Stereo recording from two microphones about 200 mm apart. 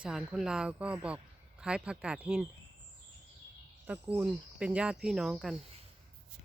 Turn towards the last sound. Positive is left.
turn(degrees=0)  # may be behind; listen again after turning